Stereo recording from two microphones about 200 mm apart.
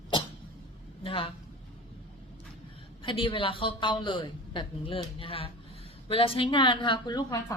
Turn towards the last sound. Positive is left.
turn(degrees=15)  # may be behind; listen again after turning